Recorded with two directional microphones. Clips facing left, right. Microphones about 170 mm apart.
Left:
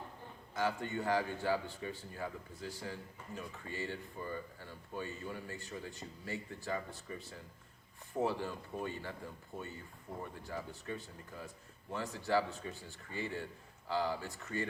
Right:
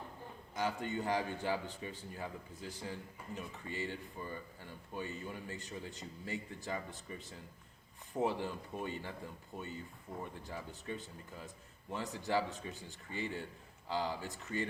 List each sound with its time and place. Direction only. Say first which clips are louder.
0.5 s a man's voice: left 1 dB; 20° right (ahead or behind)
10.4 s a man's voice: left 2 dB; 20° right (ahead or behind)